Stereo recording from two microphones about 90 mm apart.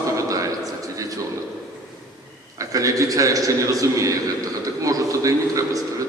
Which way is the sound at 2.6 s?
40° right (ahead or behind).